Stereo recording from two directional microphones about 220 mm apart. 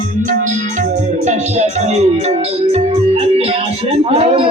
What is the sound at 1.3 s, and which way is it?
A man's voice, 30° right (ahead or behind).